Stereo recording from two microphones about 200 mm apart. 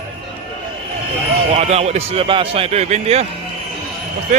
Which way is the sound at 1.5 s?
30° right (ahead or behind).